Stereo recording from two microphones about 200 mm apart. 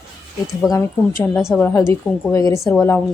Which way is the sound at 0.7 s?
15° left (ahead or behind).